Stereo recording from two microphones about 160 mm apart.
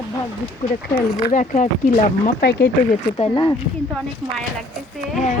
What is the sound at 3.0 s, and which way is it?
Speech, 35° left (ahead or behind).